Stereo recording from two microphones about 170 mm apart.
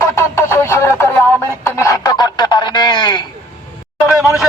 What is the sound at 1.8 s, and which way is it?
Fowl, 20° left (ahead or behind).